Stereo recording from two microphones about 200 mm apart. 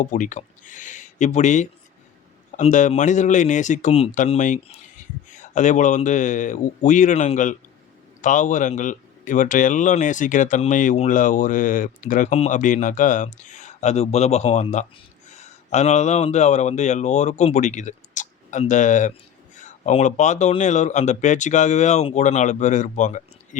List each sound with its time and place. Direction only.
0.0 s speech: 40° left (ahead or behind)